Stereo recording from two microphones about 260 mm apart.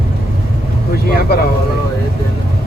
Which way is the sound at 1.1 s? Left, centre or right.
Left.